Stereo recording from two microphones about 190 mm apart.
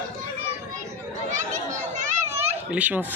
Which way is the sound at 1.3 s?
40° right (ahead or behind).